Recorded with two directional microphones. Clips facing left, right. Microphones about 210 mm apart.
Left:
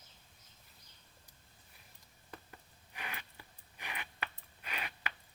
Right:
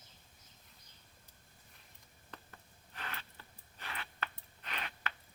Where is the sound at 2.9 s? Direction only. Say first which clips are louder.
Even; 15° left (ahead or behind).